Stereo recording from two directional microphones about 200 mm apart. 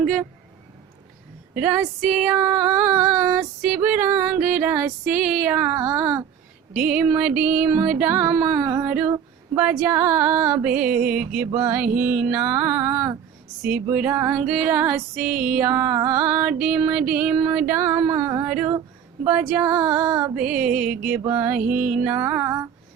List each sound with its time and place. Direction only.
0.0 s speech: centre (ahead or behind)
1.5 s music: 5° right (ahead or behind)
15.8 s music: 20° right (ahead or behind)
16.0 s music: 5° right (ahead or behind)